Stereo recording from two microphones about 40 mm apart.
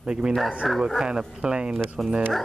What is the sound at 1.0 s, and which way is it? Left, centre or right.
Speech, centre.